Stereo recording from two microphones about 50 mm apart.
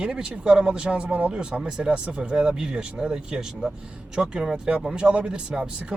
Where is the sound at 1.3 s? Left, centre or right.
Centre.